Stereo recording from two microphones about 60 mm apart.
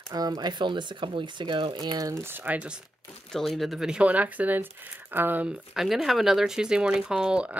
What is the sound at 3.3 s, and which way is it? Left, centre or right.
Speech, centre.